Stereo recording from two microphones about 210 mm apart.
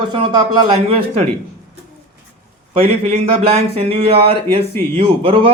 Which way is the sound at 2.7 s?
25° right (ahead or behind).